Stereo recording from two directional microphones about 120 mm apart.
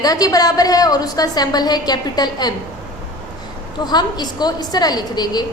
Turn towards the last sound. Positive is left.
turn(degrees=35)  # may be behind; listen again after turning